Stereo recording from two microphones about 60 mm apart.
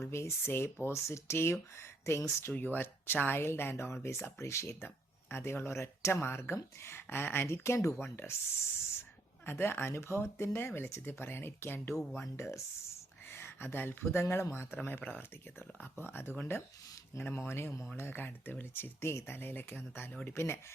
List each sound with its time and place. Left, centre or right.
0.0 s speech: left
2.6 s speech: left
9.5 s speech: left
12.2 s speech: left
14.8 s speech: left
20.3 s speech: left